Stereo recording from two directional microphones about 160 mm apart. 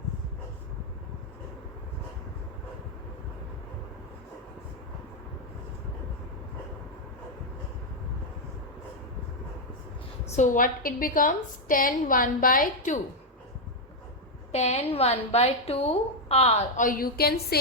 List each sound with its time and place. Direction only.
10.2 s a woman's voice: 50° left (ahead or behind)
14.5 s a woman's voice: 40° left (ahead or behind)
16.8 s a woman's voice: 65° left (ahead or behind)